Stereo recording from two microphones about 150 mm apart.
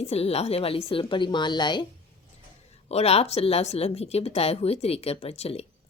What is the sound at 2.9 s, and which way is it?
Speech, 45° left (ahead or behind).